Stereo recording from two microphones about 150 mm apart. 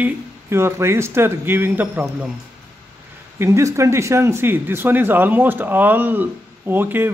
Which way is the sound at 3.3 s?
20° right (ahead or behind).